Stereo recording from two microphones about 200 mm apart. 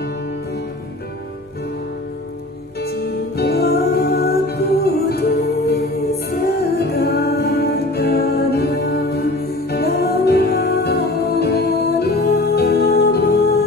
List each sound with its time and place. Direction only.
2.8 s music: 50° left (ahead or behind)